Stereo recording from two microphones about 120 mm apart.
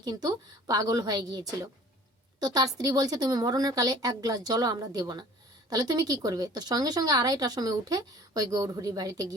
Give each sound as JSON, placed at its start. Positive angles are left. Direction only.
{"t": 0.0, "sound": "speech", "side_deg": -30}